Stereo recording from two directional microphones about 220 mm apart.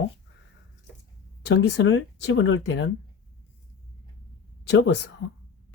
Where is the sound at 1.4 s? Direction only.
50° left (ahead or behind).